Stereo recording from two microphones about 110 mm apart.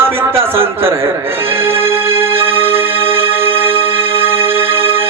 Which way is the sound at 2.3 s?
20° right (ahead or behind).